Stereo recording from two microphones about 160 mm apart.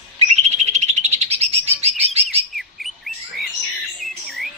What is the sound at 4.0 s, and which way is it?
Squawk, centre (ahead or behind).